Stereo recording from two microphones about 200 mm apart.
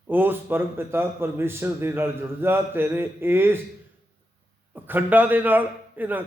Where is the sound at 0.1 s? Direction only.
10° right (ahead or behind).